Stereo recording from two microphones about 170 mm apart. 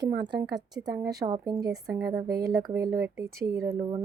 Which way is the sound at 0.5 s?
20° right (ahead or behind).